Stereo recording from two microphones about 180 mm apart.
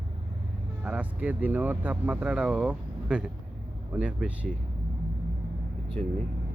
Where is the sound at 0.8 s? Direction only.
10° right (ahead or behind).